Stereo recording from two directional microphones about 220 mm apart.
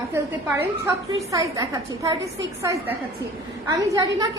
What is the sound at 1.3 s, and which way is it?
A woman's voice, 15° right (ahead or behind).